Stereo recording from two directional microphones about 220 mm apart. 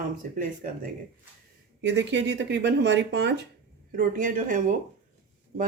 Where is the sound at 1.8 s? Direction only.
55° right (ahead or behind).